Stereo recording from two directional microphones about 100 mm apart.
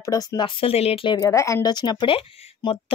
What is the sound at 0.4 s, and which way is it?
Speech, 65° left (ahead or behind).